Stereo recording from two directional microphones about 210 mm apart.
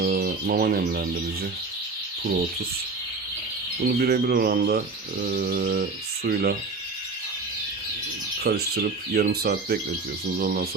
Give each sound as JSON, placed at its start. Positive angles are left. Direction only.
{"t": 0.0, "sound": "speech", "side_deg": -45}
{"t": 3.8, "sound": "speech", "side_deg": -45}
{"t": 8.4, "sound": "speech", "side_deg": -50}